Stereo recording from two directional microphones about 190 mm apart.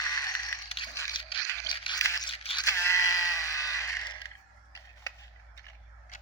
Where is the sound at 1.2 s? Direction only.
25° left (ahead or behind).